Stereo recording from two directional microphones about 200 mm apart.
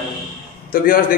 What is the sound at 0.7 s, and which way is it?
Speech, 45° left (ahead or behind).